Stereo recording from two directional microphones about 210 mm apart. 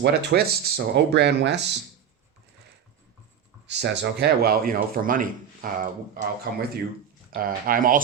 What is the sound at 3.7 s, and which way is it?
Speech, 55° right (ahead or behind).